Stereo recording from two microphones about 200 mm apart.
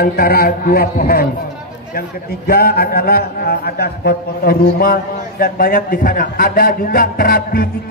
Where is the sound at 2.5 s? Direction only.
50° left (ahead or behind).